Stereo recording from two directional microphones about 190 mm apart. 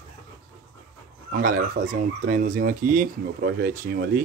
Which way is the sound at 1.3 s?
45° right (ahead or behind).